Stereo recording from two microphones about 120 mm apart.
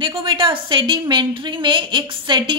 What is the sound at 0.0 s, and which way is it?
A woman's voice, 45° right (ahead or behind).